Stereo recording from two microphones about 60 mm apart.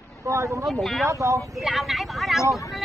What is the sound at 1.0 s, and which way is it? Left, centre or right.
Speech, right.